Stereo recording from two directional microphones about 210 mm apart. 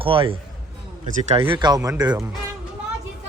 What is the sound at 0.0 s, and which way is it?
Speech, 25° right (ahead or behind).